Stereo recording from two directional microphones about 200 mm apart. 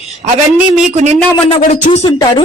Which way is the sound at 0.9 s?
35° right (ahead or behind).